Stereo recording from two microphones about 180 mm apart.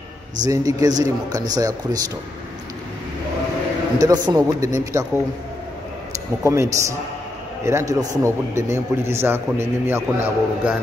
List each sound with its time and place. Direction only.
0.4 s a man's voice: 20° right (ahead or behind)
4.0 s a man's voice: 20° right (ahead or behind)
6.4 s a man's voice: 15° right (ahead or behind)